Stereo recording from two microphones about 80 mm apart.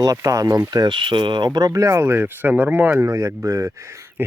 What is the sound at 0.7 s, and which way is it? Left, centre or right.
Speech, right.